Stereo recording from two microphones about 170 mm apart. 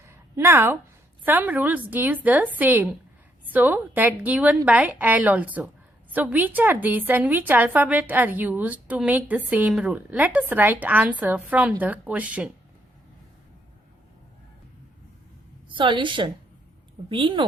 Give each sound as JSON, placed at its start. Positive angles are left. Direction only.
{"t": 0.0, "sound": "a sound", "side_deg": -15}
{"t": 1.2, "sound": "a woman's voice", "side_deg": -10}
{"t": 15.7, "sound": "a woman's voice", "side_deg": -30}